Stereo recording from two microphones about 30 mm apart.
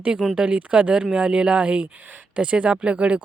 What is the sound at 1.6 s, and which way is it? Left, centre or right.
Speech, right.